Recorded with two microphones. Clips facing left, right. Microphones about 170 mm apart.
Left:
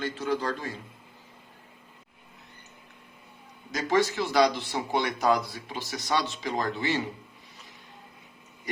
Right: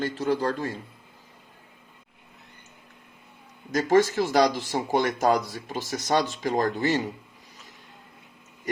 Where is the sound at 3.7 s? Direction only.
45° right (ahead or behind).